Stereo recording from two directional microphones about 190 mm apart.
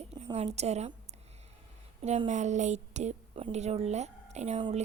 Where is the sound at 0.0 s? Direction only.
35° right (ahead or behind).